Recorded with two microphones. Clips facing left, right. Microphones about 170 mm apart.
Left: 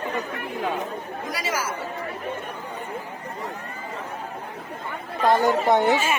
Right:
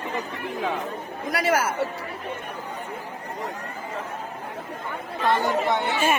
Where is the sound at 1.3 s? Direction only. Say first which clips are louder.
Right 7 dB; 60° right (ahead or behind).